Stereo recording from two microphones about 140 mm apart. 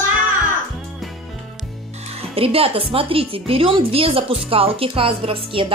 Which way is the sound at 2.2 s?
45° right (ahead or behind).